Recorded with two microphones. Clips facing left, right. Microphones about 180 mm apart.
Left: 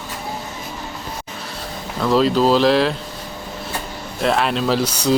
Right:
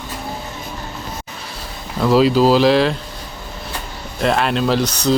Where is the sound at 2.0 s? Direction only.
5° right (ahead or behind).